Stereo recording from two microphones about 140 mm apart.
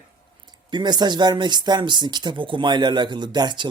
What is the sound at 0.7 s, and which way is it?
Speech, 30° right (ahead or behind).